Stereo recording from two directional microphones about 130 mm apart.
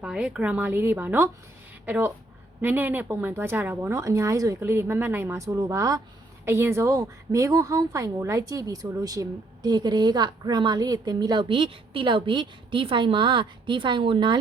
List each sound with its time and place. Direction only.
0.0 s a woman's voice: 5° right (ahead or behind); by 14.3 s 40° right (ahead or behind)